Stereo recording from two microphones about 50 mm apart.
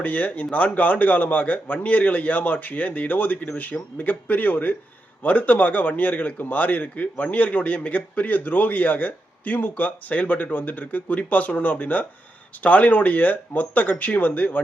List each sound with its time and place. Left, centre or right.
0.0 s speech: left